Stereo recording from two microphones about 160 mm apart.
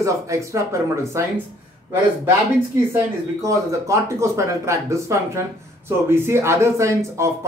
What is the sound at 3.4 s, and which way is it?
Speech, 20° right (ahead or behind).